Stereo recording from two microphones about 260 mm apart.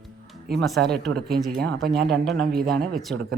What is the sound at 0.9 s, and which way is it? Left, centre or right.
Speech, centre.